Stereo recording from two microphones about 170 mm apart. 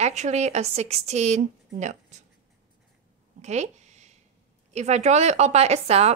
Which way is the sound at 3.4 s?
40° right (ahead or behind).